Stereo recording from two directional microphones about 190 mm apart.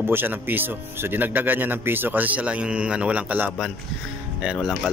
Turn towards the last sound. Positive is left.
turn(degrees=-5)  # may be behind; listen again after turning